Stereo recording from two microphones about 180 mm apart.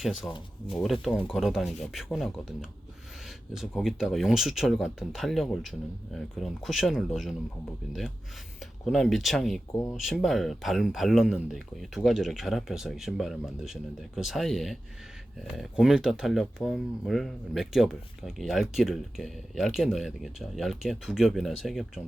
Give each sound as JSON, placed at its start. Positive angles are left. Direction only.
{"t": 0.0, "sound": "speech", "side_deg": 0}
{"t": 8.8, "sound": "speech", "side_deg": 0}
{"t": 15.8, "sound": "speech", "side_deg": -5}